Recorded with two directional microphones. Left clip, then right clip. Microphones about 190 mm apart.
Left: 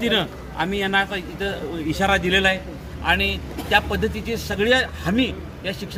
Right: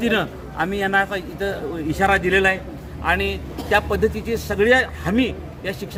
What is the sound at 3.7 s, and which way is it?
A man's voice, 5° right (ahead or behind).